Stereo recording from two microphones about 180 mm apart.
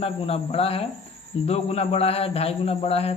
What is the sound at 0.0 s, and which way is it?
Speech, 35° left (ahead or behind).